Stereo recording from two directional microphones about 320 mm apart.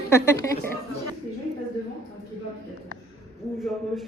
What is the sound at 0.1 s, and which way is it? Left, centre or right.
Speech, centre.